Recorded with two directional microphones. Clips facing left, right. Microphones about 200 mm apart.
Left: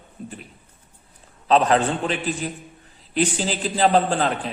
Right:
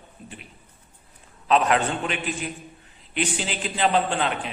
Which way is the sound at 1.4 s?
35° left (ahead or behind).